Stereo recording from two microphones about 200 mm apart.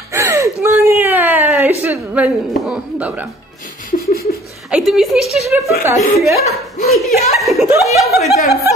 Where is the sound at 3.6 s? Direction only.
45° left (ahead or behind).